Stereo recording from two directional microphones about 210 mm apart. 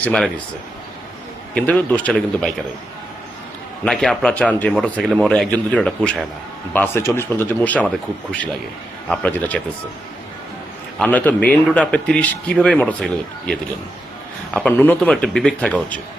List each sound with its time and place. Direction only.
0.0 s speech: 5° left (ahead or behind)
1.5 s speech: 5° left (ahead or behind)
3.8 s speech: centre (ahead or behind)
11.0 s speech: 5° left (ahead or behind)
14.5 s speech: 10° left (ahead or behind)